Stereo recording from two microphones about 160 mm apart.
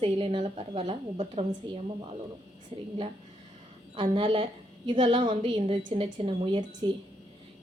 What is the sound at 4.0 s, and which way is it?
A woman's voice, 35° right (ahead or behind).